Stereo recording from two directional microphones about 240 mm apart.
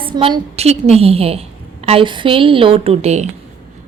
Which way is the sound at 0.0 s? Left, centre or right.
Right.